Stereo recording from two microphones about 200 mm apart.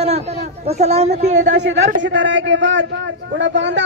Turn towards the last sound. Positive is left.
turn(degrees=-65)  # may be behind; listen again after turning